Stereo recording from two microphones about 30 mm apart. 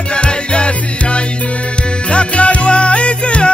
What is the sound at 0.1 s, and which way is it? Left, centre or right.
Music, left.